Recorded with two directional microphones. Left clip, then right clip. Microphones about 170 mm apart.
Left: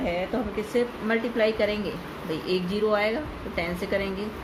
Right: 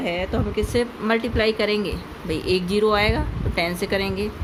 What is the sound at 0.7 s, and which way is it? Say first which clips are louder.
Speech: right 2 dB; 70° right (ahead or behind).